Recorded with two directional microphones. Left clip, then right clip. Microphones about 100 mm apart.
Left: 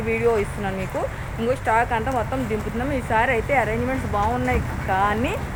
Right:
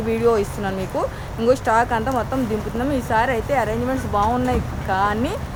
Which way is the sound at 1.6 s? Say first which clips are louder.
Right 2 dB; 25° right (ahead or behind).